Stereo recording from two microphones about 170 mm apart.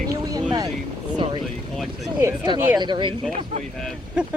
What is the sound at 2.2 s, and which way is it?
Speech, 25° right (ahead or behind).